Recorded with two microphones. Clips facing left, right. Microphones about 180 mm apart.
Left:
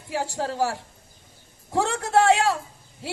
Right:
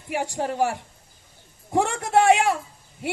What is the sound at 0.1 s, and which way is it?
A man's voice, 20° right (ahead or behind).